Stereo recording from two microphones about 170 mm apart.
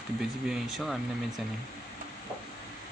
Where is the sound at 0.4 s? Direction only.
Centre (ahead or behind).